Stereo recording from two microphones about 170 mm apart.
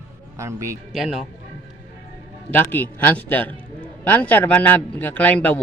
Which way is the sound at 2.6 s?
10° left (ahead or behind).